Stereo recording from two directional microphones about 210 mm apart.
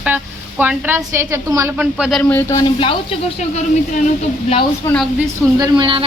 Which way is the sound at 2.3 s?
10° left (ahead or behind).